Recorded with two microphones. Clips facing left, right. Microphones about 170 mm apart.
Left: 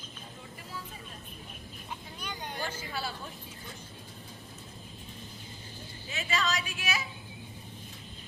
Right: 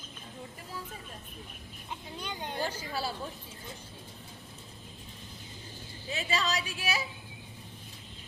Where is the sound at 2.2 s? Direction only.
25° right (ahead or behind).